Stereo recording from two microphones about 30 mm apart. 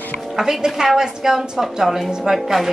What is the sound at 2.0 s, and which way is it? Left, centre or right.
Speech, right.